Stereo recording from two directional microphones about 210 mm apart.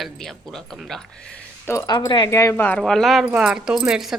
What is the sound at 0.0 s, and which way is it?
Speech, centre (ahead or behind).